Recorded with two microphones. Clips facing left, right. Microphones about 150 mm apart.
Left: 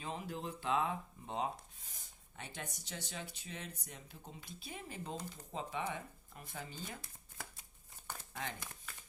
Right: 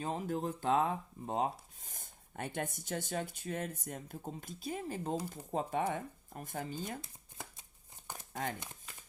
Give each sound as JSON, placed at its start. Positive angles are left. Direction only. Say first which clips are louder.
{"t": 0.0, "sound": "speech", "louder": "right 7 dB", "side_deg": -45}
{"t": 7.0, "sound": "shuffling cards", "louder": "right 2 dB", "side_deg": -20}
{"t": 8.0, "sound": "crumpling", "louder": "right 1 dB", "side_deg": -15}
{"t": 8.3, "sound": "speech", "louder": "right 6 dB", "side_deg": -40}
{"t": 8.5, "sound": "speech", "louder": "right 2 dB", "side_deg": -20}